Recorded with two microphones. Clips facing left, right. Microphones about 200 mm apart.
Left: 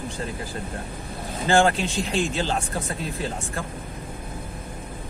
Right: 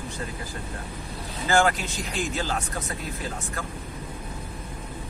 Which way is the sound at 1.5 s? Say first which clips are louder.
Left 3 dB; 25° left (ahead or behind).